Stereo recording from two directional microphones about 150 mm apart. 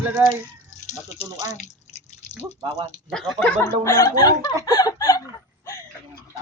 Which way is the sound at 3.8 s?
20° left (ahead or behind).